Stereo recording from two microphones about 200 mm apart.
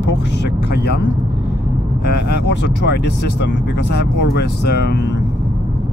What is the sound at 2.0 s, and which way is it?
Speech, 55° left (ahead or behind).